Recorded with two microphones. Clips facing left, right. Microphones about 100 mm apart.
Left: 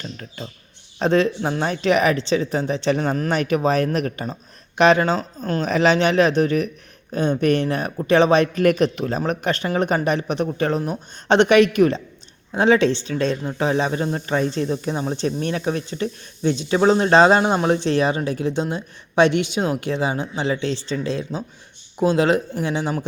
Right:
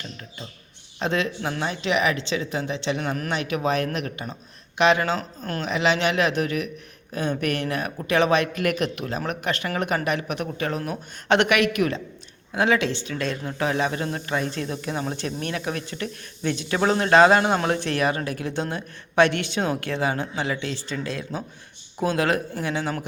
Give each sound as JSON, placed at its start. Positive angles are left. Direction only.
{"t": 0.9, "sound": "a man's voice", "side_deg": 35}
{"t": 1.6, "sound": "a man's voice", "side_deg": 45}
{"t": 17.4, "sound": "speech", "side_deg": 15}